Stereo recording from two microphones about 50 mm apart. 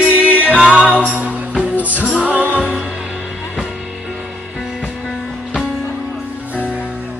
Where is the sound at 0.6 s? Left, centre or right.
Centre.